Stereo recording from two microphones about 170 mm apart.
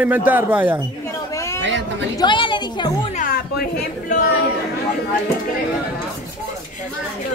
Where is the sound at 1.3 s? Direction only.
15° left (ahead or behind).